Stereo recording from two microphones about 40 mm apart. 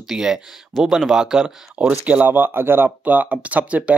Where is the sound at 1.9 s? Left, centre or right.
Right.